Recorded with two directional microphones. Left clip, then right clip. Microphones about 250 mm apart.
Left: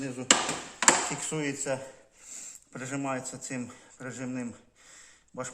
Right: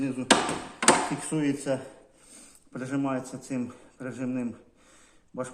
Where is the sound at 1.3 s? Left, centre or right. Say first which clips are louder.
Right 3 dB; left.